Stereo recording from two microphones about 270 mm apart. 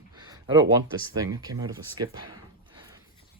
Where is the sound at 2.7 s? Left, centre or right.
Centre.